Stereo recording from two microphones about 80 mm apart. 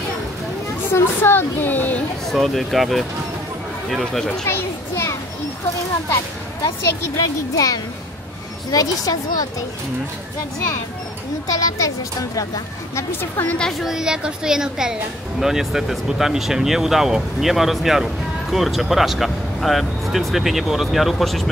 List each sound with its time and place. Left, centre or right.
0.9 s a woman's voice: left
2.2 s speech: centre
4.5 s children playing: left
7.2 s speech: left
11.4 s speech: left
13.1 s a woman's voice: left
13.6 s a woman's voice: centre